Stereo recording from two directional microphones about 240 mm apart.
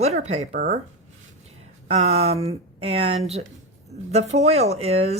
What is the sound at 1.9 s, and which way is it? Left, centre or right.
A woman's voice, right.